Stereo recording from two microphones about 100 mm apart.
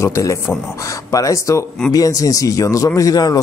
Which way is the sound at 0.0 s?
30° left (ahead or behind).